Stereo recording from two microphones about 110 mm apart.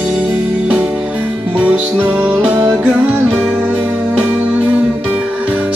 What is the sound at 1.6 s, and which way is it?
Music, 15° right (ahead or behind).